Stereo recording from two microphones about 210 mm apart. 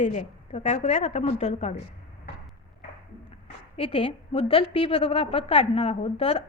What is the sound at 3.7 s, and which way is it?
A woman's voice, 25° left (ahead or behind).